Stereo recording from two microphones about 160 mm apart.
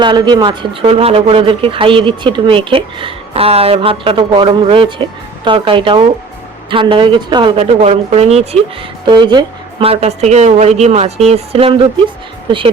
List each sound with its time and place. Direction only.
0.0 s speech: 30° right (ahead or behind)
9.0 s speech: 30° right (ahead or behind)